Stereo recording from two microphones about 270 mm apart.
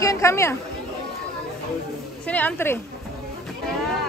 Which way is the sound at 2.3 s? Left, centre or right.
Centre.